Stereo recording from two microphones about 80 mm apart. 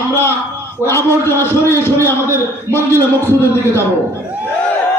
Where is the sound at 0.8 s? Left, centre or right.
Left.